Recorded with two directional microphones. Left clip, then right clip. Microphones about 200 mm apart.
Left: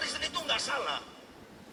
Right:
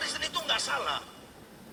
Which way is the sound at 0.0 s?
20° right (ahead or behind).